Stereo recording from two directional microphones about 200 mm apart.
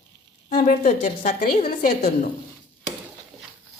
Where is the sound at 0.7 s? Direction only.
45° left (ahead or behind).